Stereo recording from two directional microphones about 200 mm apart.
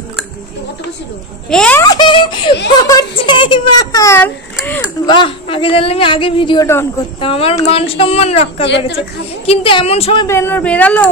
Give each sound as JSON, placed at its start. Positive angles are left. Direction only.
{"t": 1.5, "sound": "a child's voice", "side_deg": 5}
{"t": 1.8, "sound": "a sound", "side_deg": 20}
{"t": 2.7, "sound": "speech", "side_deg": 20}
{"t": 7.2, "sound": "speech", "side_deg": 30}
{"t": 8.6, "sound": "a woman's voice", "side_deg": 60}
{"t": 9.5, "sound": "speech", "side_deg": 25}
{"t": 10.2, "sound": "speech", "side_deg": 10}